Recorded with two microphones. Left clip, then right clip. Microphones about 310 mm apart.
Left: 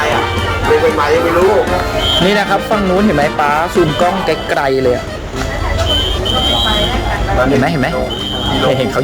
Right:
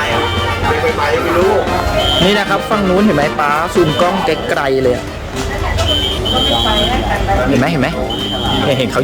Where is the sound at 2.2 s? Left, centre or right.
Centre.